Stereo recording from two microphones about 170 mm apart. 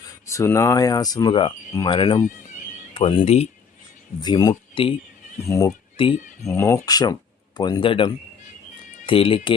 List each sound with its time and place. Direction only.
0.3 s speech: 15° left (ahead or behind); by 3.5 s 40° left (ahead or behind)
4.2 s speech: 25° left (ahead or behind)
5.5 s speech: 20° left (ahead or behind)
6.0 s speech: 30° left (ahead or behind)
6.4 s speech: 15° left (ahead or behind)